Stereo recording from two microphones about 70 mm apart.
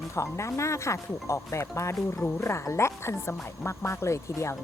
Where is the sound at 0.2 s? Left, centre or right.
Left.